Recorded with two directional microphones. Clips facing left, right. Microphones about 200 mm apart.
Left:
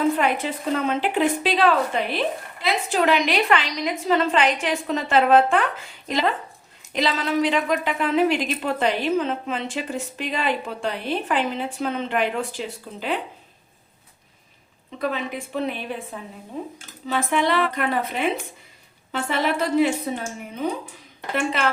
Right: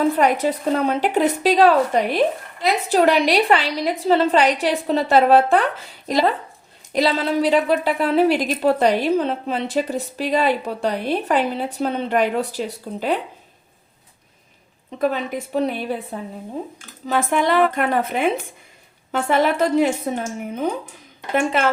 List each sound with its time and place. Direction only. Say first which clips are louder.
0.2 s speech: right 5 dB; 40° right (ahead or behind)
15.1 s speech: right 4 dB; 40° right (ahead or behind)
17.1 s speech: right 3 dB; 50° right (ahead or behind)